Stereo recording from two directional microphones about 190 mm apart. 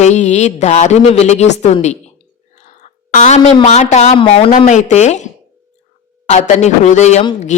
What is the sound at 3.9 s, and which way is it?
Speech, 35° left (ahead or behind).